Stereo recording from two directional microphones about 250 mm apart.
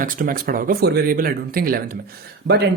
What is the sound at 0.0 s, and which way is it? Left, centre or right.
Speech, right.